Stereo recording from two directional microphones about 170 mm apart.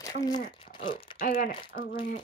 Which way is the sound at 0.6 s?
30° left (ahead or behind).